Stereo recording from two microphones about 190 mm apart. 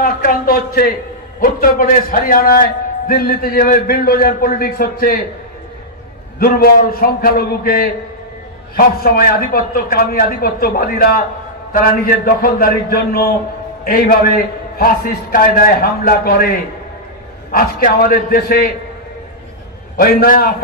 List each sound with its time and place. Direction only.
0.0 s a sound: 50° left (ahead or behind)
1.4 s a man's voice: 45° left (ahead or behind)
6.4 s a man's voice: 50° left (ahead or behind)
17.5 s a man's voice: 50° left (ahead or behind)
20.0 s a man's voice: 50° left (ahead or behind)